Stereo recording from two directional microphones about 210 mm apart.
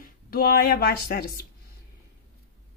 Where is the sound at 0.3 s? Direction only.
45° left (ahead or behind).